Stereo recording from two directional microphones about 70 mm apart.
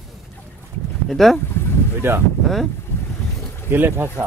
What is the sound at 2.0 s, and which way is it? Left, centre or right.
Speech, right.